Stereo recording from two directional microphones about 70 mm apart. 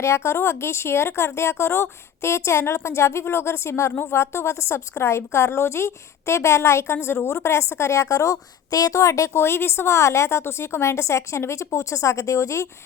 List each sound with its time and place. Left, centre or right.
0.0 s a woman's voice: left